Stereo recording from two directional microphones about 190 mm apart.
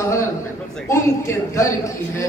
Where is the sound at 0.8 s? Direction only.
15° left (ahead or behind).